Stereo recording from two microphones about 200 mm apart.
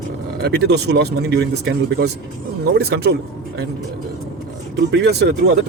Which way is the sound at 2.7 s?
55° right (ahead or behind).